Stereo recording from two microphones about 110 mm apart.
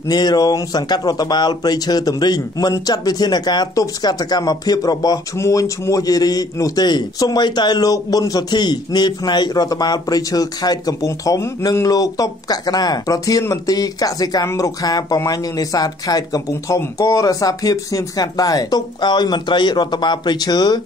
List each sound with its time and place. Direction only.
0.1 s speech: 40° left (ahead or behind)